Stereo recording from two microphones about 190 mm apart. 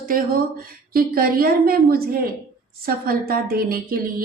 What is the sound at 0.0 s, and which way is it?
A woman's voice, 50° right (ahead or behind).